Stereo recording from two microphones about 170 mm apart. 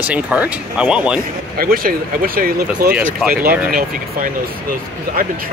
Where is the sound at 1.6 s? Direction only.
55° right (ahead or behind).